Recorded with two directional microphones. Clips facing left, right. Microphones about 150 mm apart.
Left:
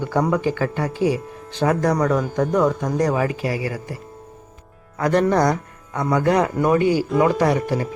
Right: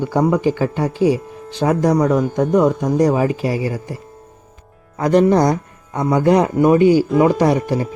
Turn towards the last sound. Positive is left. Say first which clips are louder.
# right 3 dB
turn(degrees=-20)  # may be behind; listen again after turning